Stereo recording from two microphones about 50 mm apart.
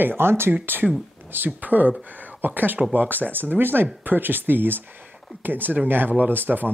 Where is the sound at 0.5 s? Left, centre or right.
Right.